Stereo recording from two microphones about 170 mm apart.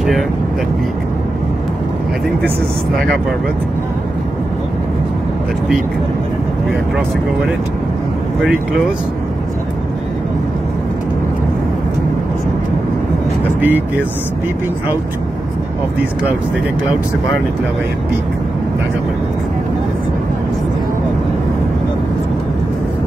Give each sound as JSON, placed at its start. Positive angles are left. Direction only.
{"t": 13.6, "sound": "speech", "side_deg": -10}